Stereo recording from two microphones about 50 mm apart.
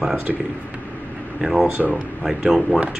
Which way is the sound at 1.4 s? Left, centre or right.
Centre.